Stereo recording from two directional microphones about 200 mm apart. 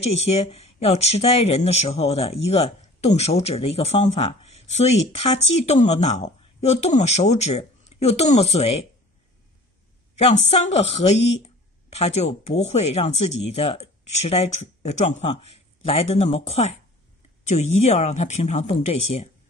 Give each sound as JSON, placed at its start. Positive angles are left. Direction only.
{"t": 0.0, "sound": "speech", "side_deg": 30}
{"t": 10.1, "sound": "speech", "side_deg": 30}